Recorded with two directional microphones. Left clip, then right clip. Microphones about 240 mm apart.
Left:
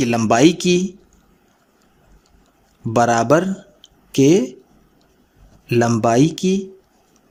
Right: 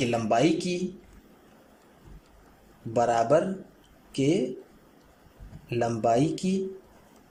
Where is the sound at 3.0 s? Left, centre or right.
Left.